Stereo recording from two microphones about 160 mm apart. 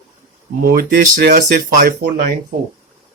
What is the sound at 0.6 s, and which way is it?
Speech, 65° right (ahead or behind).